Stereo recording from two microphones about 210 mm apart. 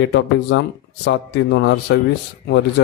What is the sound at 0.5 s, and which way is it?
A man's voice, 60° left (ahead or behind).